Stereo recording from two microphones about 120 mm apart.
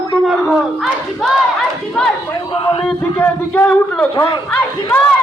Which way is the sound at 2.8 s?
15° left (ahead or behind).